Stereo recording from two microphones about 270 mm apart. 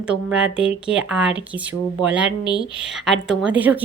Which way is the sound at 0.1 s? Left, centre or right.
Centre.